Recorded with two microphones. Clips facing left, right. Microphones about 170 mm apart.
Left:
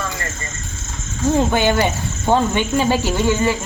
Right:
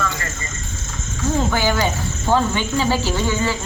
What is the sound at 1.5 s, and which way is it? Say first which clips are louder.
Speech: left 3 dB; 20° left (ahead or behind).